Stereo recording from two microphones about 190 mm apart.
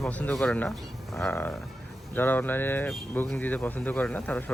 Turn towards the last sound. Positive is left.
turn(degrees=5)  # may be behind; listen again after turning